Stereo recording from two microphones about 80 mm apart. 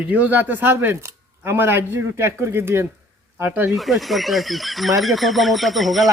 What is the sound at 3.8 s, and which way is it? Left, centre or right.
Speech, centre.